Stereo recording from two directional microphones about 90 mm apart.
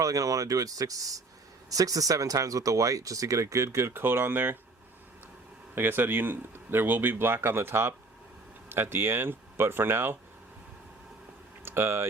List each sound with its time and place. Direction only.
0.0 s speech: 40° right (ahead or behind); by 4.5 s 25° right (ahead or behind)
5.7 s speech: 25° right (ahead or behind)
11.6 s a sound: 25° right (ahead or behind)